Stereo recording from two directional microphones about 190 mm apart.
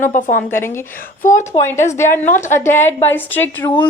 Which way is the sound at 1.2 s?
40° left (ahead or behind).